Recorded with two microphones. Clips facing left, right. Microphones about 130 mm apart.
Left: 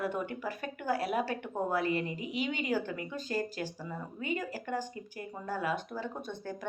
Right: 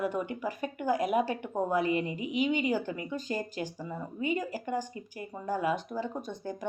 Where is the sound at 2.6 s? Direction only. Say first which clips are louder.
Right 2 dB; 15° right (ahead or behind).